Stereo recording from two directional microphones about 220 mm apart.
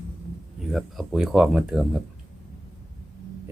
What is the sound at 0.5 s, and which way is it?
Speech, centre (ahead or behind).